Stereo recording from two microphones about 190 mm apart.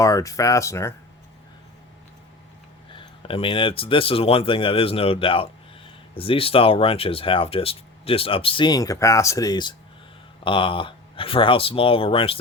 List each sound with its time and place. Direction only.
0.0 s speech: 15° left (ahead or behind)
2.9 s speech: 25° left (ahead or behind)